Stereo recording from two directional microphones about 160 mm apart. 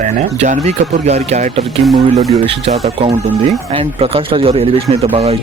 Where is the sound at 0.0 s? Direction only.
50° right (ahead or behind).